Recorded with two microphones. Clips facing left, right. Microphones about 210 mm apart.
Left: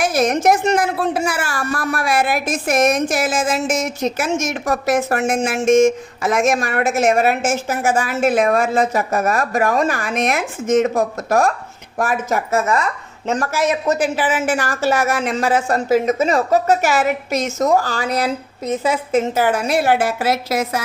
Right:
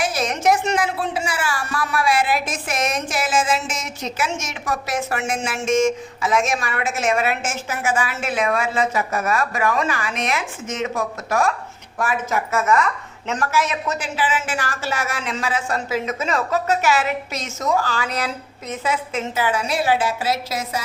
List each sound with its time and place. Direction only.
0.0 s a woman's voice: 50° left (ahead or behind)